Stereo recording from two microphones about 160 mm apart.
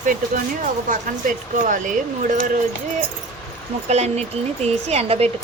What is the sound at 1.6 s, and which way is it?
Speech, 55° right (ahead or behind).